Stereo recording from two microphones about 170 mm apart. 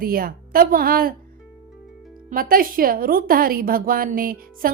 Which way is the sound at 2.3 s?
60° right (ahead or behind).